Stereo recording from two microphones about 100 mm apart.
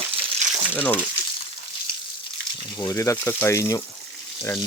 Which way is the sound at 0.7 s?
15° left (ahead or behind).